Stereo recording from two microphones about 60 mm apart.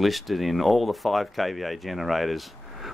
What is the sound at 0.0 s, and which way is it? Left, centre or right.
Speech, centre.